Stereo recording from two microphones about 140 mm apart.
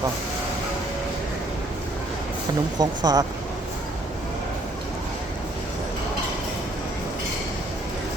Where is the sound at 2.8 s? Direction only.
30° right (ahead or behind).